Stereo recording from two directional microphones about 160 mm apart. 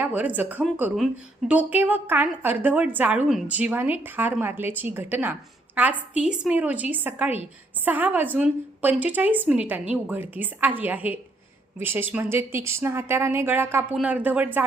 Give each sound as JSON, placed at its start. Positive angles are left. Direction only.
{"t": 0.0, "sound": "a woman's voice", "side_deg": -10}